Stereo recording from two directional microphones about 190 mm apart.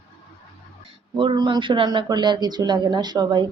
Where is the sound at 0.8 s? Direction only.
25° right (ahead or behind).